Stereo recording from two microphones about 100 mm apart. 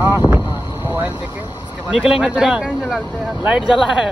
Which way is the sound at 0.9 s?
15° right (ahead or behind).